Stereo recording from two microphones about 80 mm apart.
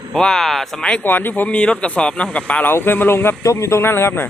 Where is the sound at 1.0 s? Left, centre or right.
Left.